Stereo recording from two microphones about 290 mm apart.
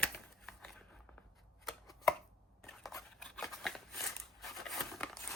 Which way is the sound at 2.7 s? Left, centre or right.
Centre.